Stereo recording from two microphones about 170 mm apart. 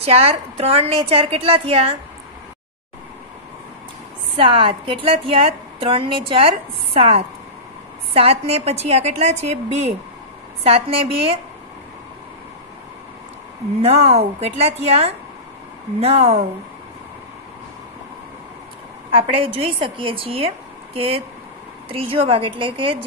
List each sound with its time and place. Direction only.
0.0 s a woman's voice: 35° right (ahead or behind)
4.4 s a woman's voice: 30° right (ahead or behind)
13.7 s a woman's voice: 35° right (ahead or behind)
19.1 s a woman's voice: 30° right (ahead or behind)